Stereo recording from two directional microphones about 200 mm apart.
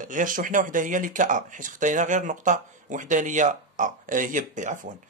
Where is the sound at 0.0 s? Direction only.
40° right (ahead or behind).